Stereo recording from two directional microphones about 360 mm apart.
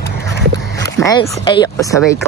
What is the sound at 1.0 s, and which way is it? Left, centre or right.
Speech, centre.